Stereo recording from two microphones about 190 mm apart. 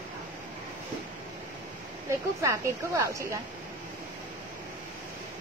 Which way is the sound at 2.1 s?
15° right (ahead or behind).